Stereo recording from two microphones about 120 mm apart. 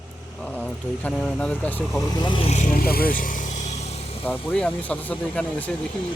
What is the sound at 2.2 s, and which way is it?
Speech, 45° left (ahead or behind).